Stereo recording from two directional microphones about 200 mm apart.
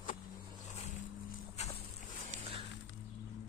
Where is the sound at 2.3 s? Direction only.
30° right (ahead or behind).